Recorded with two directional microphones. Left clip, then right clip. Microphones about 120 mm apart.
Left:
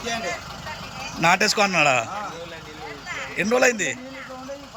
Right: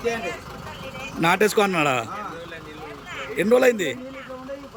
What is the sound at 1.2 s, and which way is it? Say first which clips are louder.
Speech: even; 25° right (ahead or behind).